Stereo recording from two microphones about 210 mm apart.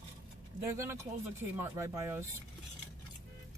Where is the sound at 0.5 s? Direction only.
10° right (ahead or behind).